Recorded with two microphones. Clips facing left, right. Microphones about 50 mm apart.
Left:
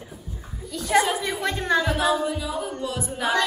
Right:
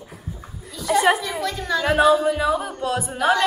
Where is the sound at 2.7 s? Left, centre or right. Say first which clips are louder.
Right 5 dB; right.